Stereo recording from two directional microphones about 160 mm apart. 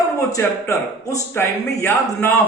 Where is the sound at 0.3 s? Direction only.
20° left (ahead or behind).